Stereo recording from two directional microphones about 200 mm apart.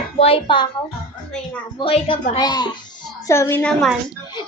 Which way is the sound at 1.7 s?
25° left (ahead or behind).